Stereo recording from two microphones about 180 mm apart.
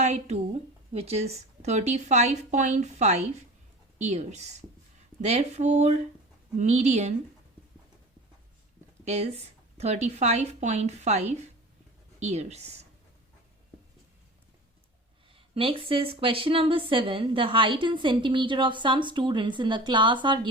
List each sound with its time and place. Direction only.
0.0 s a woman's voice: 40° right (ahead or behind)
9.0 s speech: 35° right (ahead or behind)
15.4 s a woman's voice: 30° right (ahead or behind)